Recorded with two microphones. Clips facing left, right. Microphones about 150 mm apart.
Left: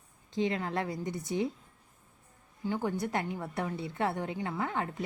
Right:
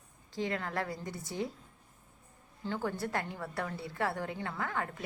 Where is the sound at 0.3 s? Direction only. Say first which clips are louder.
Left 4 dB; 20° left (ahead or behind).